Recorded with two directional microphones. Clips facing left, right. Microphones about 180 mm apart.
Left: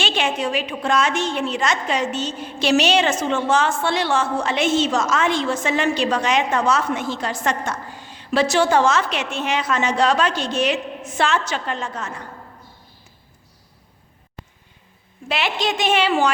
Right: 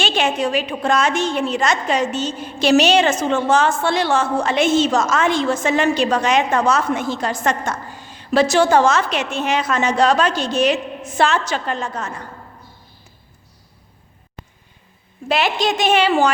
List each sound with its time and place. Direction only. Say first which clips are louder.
0.0 s a woman's voice: right 3 dB; 40° right (ahead or behind)
15.3 s a woman's voice: right 4 dB; 40° right (ahead or behind)